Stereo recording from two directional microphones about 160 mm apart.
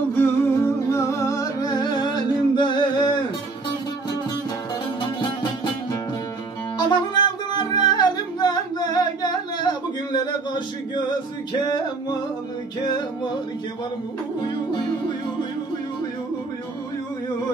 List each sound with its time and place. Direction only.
0.1 s music: 10° left (ahead or behind); by 3.2 s 30° left (ahead or behind)
6.8 s music: 25° left (ahead or behind)